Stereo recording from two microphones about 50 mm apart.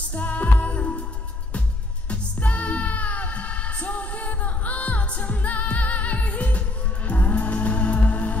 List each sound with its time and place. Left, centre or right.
0.1 s music: left
2.0 s music: left